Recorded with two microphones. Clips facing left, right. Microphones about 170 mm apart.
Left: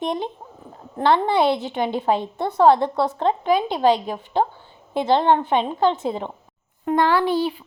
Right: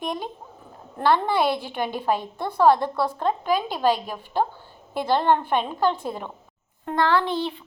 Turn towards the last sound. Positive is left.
turn(degrees=10)  # may be behind; listen again after turning